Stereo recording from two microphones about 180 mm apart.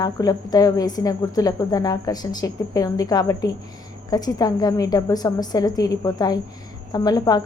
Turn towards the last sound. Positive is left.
turn(degrees=20)  # may be behind; listen again after turning